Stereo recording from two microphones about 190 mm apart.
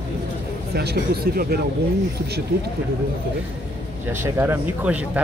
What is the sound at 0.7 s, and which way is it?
Speech, 55° right (ahead or behind).